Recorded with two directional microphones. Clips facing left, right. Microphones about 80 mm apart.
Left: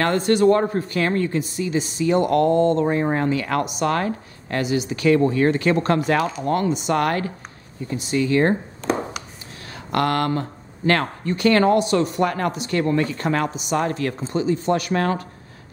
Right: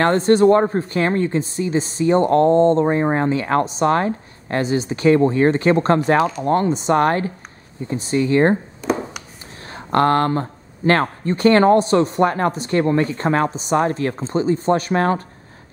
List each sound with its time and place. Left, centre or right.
0.0 s a woman's voice: right
8.8 s a sound: centre
9.7 s a woman's voice: right